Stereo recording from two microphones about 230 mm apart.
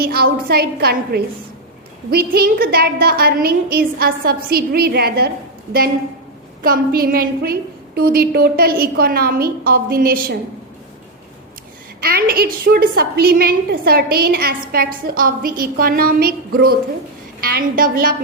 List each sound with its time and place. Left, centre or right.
0.0 s a woman's voice: right
6.6 s a woman's voice: right
11.9 s a woman's voice: right
17.4 s a woman's voice: right